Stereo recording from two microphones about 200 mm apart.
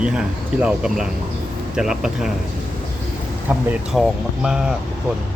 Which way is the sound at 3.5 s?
5° right (ahead or behind).